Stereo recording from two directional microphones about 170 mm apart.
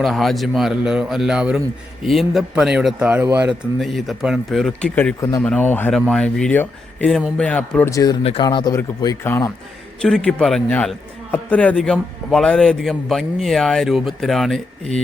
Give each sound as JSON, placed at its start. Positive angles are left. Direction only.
{"t": 0.0, "sound": "a man's voice", "side_deg": 0}
{"t": 7.9, "sound": "speech", "side_deg": 20}
{"t": 8.2, "sound": "speech", "side_deg": 35}
{"t": 8.4, "sound": "speech", "side_deg": 20}
{"t": 10.0, "sound": "a man's voice", "side_deg": 5}